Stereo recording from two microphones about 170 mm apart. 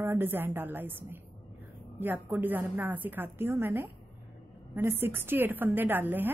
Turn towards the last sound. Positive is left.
turn(degrees=-10)  # may be behind; listen again after turning